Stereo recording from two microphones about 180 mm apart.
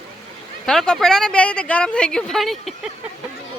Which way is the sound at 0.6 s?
5° left (ahead or behind).